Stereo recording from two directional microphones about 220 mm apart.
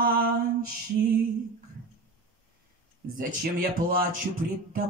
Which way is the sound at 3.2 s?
40° right (ahead or behind).